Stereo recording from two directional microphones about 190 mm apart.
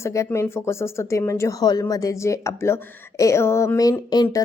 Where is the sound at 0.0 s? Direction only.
15° left (ahead or behind).